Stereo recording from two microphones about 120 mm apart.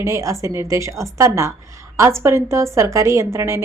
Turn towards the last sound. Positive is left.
turn(degrees=-20)  # may be behind; listen again after turning